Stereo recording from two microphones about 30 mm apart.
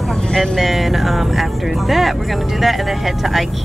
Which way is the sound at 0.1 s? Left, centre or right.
Centre.